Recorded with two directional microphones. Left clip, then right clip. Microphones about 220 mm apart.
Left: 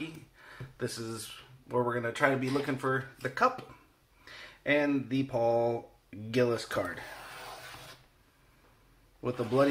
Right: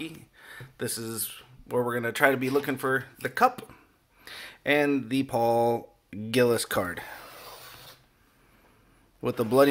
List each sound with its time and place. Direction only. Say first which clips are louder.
0.4 s speech: right 3 dB; 35° right (ahead or behind)
9.2 s speech: right 6 dB; 45° right (ahead or behind)